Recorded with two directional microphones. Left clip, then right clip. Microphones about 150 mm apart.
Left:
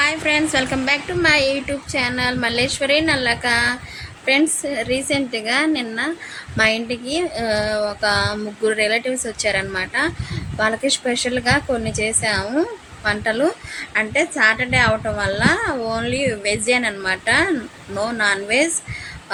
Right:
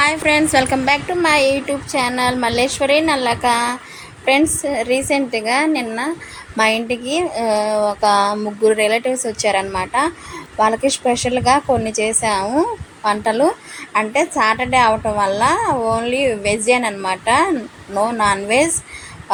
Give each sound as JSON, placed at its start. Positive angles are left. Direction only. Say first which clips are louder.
{"t": 0.0, "sound": "a woman's voice", "louder": "right 3 dB", "side_deg": -30}